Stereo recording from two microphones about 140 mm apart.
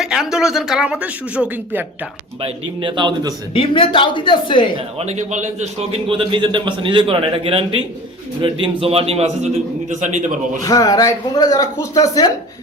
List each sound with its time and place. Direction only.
0.0 s speech: 5° right (ahead or behind)
2.4 s a man's voice: 35° right (ahead or behind)
3.5 s speech: 40° left (ahead or behind)
4.8 s speech: 50° right (ahead or behind)
6.1 s a man's voice: 35° right (ahead or behind); by 10.2 s 60° right (ahead or behind)
10.6 s speech: 25° left (ahead or behind)